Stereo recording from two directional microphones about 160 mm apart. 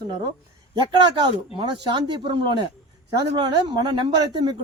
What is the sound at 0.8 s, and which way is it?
Speech, 30° right (ahead or behind).